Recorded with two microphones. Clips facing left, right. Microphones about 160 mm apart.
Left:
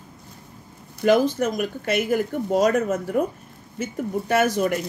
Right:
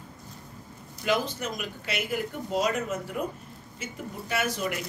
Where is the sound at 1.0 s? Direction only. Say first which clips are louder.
Left 10 dB; 50° left (ahead or behind).